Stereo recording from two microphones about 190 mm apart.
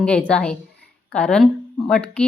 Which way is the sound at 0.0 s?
5° left (ahead or behind).